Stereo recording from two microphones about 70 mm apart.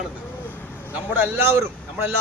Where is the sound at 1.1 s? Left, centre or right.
Right.